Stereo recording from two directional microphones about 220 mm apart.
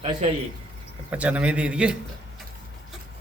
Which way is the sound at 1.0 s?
5° right (ahead or behind).